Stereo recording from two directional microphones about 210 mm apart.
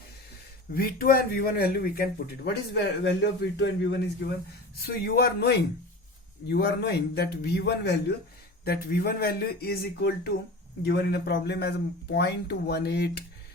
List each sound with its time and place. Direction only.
0.7 s a man's voice: 45° left (ahead or behind)